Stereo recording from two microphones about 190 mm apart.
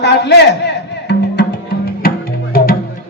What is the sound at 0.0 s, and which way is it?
Music, 65° left (ahead or behind).